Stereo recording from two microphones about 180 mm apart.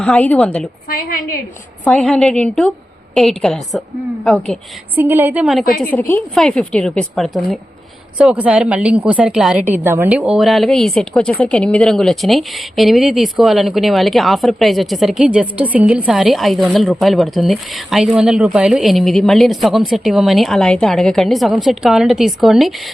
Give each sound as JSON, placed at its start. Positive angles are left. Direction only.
{"t": 0.0, "sound": "a woman's voice", "side_deg": 5}
{"t": 0.9, "sound": "a woman's voice", "side_deg": 50}
{"t": 1.8, "sound": "a woman's voice", "side_deg": 5}
{"t": 4.9, "sound": "a woman's voice", "side_deg": -10}
{"t": 5.8, "sound": "a woman's voice", "side_deg": 10}